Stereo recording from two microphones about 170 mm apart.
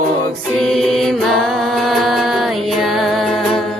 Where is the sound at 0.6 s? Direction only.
Centre (ahead or behind).